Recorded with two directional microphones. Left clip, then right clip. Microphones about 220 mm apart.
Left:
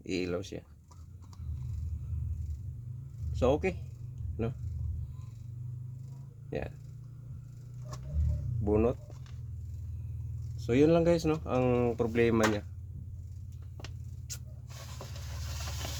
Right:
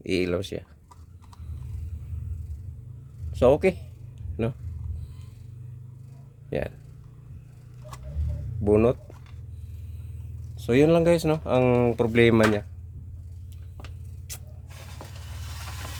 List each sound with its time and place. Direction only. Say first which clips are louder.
0.0 s speech: right 8 dB; 50° right (ahead or behind)
3.3 s speech: right 9 dB; 50° right (ahead or behind)
6.5 s speech: right 8 dB; 50° right (ahead or behind)
8.6 s speech: right 8 dB; 45° right (ahead or behind)
10.7 s speech: right 6 dB; 50° right (ahead or behind)